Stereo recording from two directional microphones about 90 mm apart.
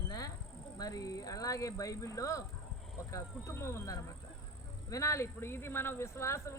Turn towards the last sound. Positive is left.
turn(degrees=30)  # may be behind; listen again after turning